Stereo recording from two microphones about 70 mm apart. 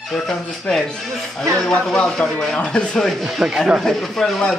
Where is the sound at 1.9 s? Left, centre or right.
Centre.